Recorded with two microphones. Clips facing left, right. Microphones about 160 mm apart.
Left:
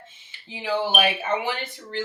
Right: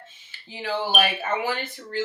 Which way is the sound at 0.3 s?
15° left (ahead or behind).